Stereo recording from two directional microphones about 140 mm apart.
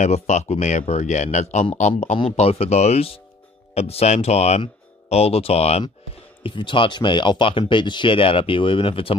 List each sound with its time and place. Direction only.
0.0 s speech: 55° left (ahead or behind)
2.1 s speech: 45° left (ahead or behind)
6.4 s speech: 35° left (ahead or behind)